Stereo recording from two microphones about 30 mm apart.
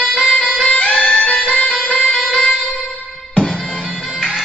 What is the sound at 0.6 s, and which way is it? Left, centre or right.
Music, left.